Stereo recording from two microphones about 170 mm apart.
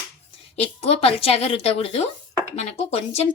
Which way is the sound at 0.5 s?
40° left (ahead or behind).